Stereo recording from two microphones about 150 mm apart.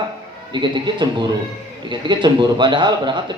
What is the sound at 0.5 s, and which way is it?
A man's voice, 30° right (ahead or behind).